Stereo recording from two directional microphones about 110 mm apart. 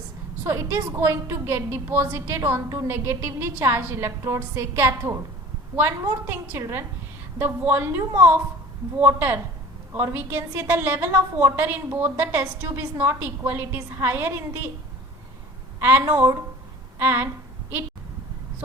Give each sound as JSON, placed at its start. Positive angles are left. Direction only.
{"t": 0.4, "sound": "a woman's voice", "side_deg": -20}
{"t": 6.2, "sound": "a woman's voice", "side_deg": -20}
{"t": 15.8, "sound": "a woman's voice", "side_deg": -20}